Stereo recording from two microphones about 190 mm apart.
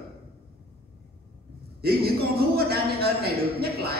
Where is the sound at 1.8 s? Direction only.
55° right (ahead or behind).